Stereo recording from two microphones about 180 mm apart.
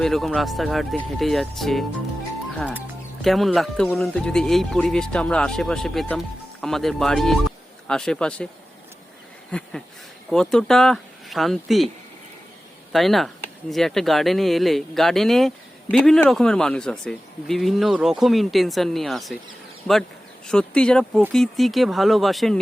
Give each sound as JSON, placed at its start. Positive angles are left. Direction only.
{"t": 0.0, "sound": "speech", "side_deg": 0}
{"t": 9.5, "sound": "a sound", "side_deg": 5}
{"t": 10.2, "sound": "speech", "side_deg": 5}
{"t": 12.9, "sound": "speech", "side_deg": 0}
{"t": 20.5, "sound": "speech", "side_deg": 5}